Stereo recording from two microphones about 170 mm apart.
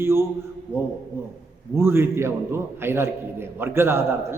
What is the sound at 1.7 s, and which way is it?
A man's voice, 15° right (ahead or behind).